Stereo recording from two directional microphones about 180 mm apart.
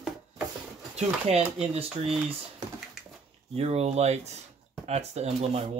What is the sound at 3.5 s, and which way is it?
Speech, 35° right (ahead or behind).